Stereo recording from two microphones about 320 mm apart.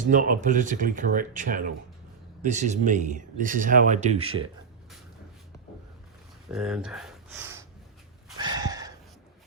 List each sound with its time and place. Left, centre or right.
0.0 s speech: right
6.5 s speech: centre
8.4 s a sound: centre